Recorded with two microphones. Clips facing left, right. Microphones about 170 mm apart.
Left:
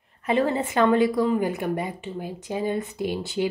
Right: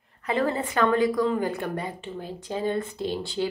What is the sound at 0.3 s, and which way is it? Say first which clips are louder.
Speech: left 3 dB; 25° left (ahead or behind).